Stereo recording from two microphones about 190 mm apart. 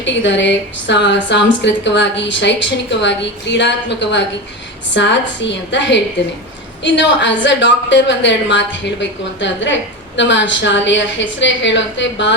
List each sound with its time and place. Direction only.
0.0 s a woman's voice: 70° left (ahead or behind)